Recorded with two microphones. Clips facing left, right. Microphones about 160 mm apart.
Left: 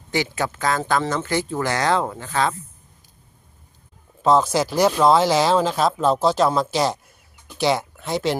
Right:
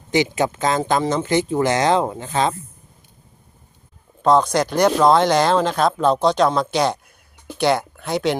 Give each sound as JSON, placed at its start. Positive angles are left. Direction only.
{"t": 0.1, "sound": "speech", "side_deg": -20}
{"t": 4.2, "sound": "speech", "side_deg": 5}